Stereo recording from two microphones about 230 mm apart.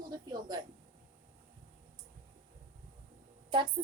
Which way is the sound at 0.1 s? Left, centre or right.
Centre.